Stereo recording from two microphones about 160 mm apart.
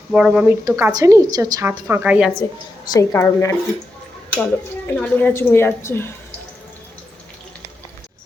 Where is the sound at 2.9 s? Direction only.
20° left (ahead or behind).